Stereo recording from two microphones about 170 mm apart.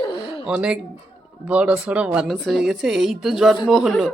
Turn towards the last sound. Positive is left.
turn(degrees=0)  # may be behind; listen again after turning